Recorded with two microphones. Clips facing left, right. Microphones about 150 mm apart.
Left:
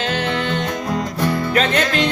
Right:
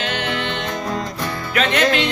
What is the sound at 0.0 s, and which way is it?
Music, 35° left (ahead or behind).